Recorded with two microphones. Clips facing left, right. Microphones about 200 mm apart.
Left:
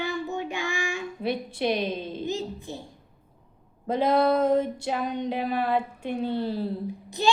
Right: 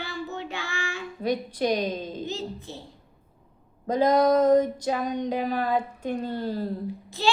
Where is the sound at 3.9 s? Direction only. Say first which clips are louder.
Right 2 dB; 5° left (ahead or behind).